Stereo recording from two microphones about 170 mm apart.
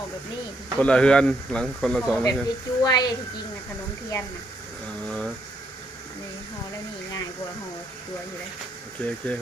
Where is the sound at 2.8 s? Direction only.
25° left (ahead or behind).